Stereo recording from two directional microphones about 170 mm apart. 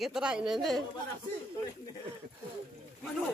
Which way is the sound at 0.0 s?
5° right (ahead or behind).